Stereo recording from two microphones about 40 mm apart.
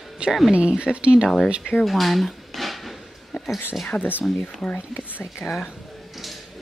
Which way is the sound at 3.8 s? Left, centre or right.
Left.